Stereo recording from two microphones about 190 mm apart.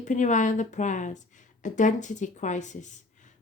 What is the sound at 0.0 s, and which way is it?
A woman's voice, 40° left (ahead or behind).